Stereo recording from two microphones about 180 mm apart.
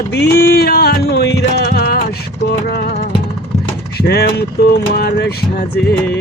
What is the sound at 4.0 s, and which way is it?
Music, 65° left (ahead or behind).